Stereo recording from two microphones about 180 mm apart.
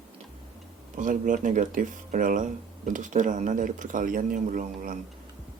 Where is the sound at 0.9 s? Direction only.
45° right (ahead or behind).